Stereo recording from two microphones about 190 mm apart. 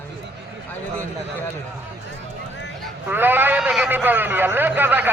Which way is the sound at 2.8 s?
10° right (ahead or behind).